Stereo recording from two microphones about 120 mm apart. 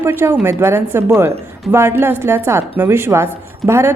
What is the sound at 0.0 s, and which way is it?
Speech, 20° right (ahead or behind).